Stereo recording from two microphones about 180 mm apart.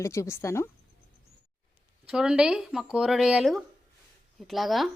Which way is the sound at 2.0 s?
5° right (ahead or behind).